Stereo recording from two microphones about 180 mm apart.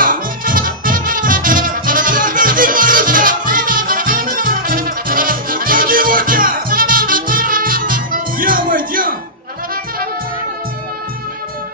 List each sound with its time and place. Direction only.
0.0 s music: 50° right (ahead or behind)